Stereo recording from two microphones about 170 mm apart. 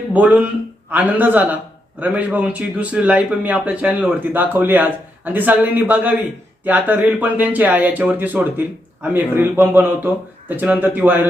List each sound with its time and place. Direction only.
0.1 s a man's voice: 10° right (ahead or behind)